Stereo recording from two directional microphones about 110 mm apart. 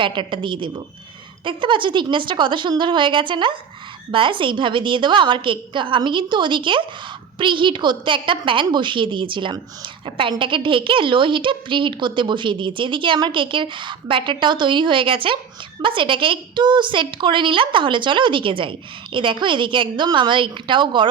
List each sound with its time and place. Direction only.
0.0 s a woman's voice: 50° right (ahead or behind)